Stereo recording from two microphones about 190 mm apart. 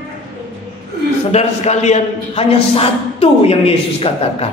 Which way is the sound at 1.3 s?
35° left (ahead or behind).